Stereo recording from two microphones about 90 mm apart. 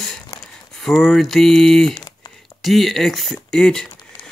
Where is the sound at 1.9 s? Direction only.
45° left (ahead or behind).